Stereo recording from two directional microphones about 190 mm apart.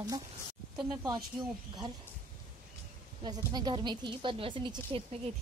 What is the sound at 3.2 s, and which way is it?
Speech, 20° right (ahead or behind).